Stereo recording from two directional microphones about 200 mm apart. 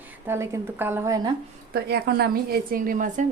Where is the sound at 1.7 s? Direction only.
50° right (ahead or behind).